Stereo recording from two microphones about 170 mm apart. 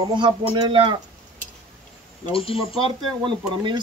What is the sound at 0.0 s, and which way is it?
Speech, 25° right (ahead or behind).